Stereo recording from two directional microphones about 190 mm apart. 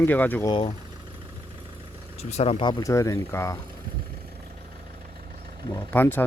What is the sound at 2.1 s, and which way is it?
Speech, 35° left (ahead or behind).